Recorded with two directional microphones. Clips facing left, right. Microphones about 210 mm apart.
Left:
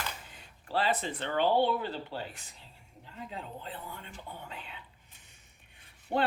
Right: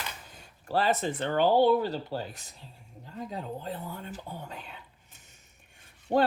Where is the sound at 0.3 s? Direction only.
45° right (ahead or behind).